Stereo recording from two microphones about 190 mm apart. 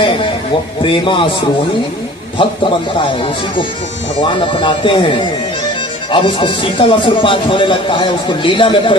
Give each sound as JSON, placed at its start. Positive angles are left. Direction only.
{"t": 0.8, "sound": "speech", "side_deg": 25}
{"t": 2.4, "sound": "speech", "side_deg": 25}
{"t": 4.2, "sound": "speech", "side_deg": 25}